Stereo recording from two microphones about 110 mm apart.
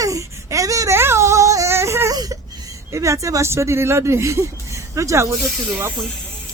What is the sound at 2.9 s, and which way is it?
Speech, 30° right (ahead or behind).